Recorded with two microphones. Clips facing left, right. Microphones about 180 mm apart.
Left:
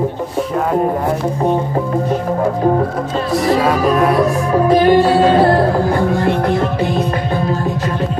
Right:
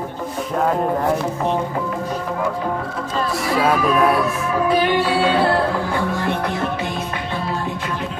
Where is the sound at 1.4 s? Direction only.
35° left (ahead or behind).